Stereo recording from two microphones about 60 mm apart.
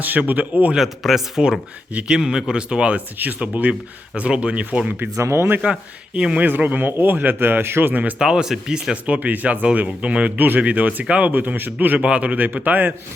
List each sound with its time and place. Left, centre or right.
0.0 s speech: right
0.7 s speech: centre; by 4.9 s right
5.1 s speech: right
6.1 s speech: centre
6.4 s speech: right
8.2 s speech: centre; by 11.9 s right
11.9 s speech: centre